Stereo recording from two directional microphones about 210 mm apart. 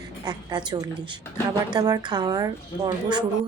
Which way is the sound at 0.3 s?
20° right (ahead or behind).